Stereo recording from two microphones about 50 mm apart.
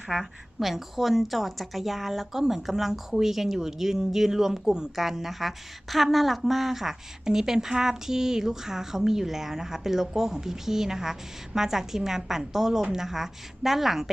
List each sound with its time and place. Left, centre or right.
0.2 s a woman's voice: centre